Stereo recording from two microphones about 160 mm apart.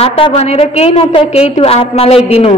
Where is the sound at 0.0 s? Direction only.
35° left (ahead or behind).